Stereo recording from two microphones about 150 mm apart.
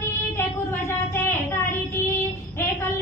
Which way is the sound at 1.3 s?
15° left (ahead or behind).